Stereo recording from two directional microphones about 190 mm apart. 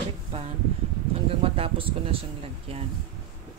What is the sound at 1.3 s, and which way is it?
Speech, 30° right (ahead or behind).